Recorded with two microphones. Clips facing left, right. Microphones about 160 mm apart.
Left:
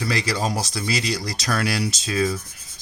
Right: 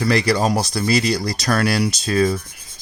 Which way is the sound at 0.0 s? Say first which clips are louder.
Right 7 dB; 60° right (ahead or behind).